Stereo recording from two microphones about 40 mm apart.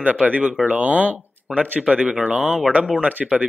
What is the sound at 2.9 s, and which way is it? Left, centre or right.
Speech, right.